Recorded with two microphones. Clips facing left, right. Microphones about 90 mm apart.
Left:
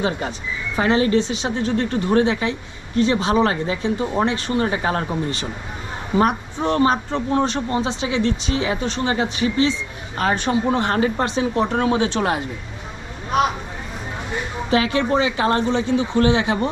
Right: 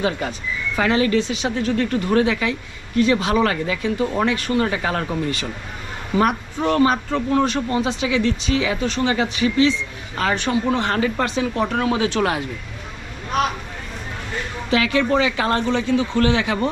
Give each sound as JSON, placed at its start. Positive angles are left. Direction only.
{"t": 0.0, "sound": "speech", "side_deg": 20}
{"t": 13.3, "sound": "speech", "side_deg": 15}
{"t": 14.3, "sound": "a sound", "side_deg": 15}
{"t": 14.7, "sound": "speech", "side_deg": 30}